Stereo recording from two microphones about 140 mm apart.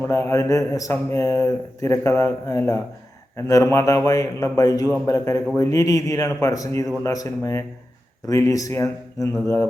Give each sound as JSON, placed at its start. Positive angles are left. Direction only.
{"t": 0.0, "sound": "speech", "side_deg": 20}